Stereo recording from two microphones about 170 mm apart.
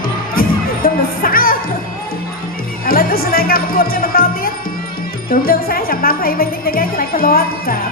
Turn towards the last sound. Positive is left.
turn(degrees=60)  # may be behind; listen again after turning